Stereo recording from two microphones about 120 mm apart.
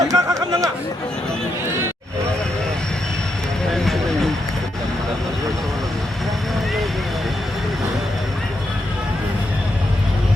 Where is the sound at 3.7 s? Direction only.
Centre (ahead or behind).